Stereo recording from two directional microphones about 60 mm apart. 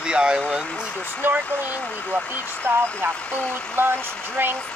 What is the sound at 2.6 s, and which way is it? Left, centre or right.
Speech, right.